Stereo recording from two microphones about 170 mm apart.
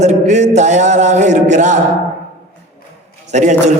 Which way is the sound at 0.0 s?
45° right (ahead or behind).